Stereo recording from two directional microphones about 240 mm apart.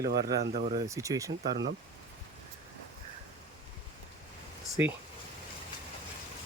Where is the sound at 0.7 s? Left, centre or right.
Centre.